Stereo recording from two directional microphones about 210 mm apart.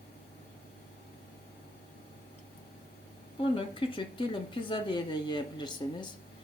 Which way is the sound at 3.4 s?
25° left (ahead or behind).